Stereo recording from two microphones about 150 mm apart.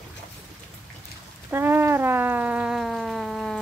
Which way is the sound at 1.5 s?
15° right (ahead or behind).